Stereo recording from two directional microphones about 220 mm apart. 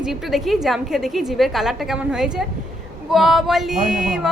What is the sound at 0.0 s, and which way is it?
A woman's voice, centre (ahead or behind).